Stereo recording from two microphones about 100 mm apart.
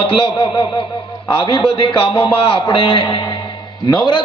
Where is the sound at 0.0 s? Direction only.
60° left (ahead or behind).